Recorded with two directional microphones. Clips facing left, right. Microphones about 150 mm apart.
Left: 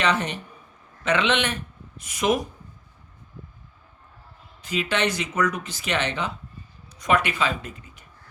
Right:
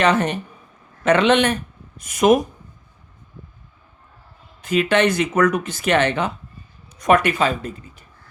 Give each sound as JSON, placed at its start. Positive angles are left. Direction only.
{"t": 0.0, "sound": "speech", "side_deg": -50}
{"t": 4.6, "sound": "speech", "side_deg": -55}